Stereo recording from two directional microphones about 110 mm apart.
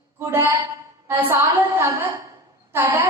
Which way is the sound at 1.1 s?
20° right (ahead or behind).